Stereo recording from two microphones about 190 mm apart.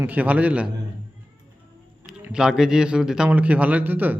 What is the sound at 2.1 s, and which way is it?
A man's voice, 5° right (ahead or behind).